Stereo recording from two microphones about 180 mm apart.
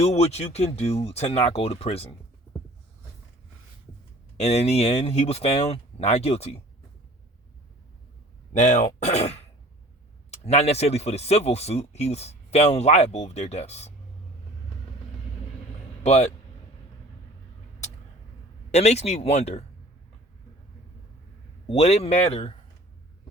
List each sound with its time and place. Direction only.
0.0 s speech: 35° left (ahead or behind)
4.4 s speech: 35° left (ahead or behind)
8.5 s speech: 40° left (ahead or behind)
16.0 s speech: 40° left (ahead or behind)
18.7 s speech: 35° left (ahead or behind)
21.7 s speech: 35° left (ahead or behind)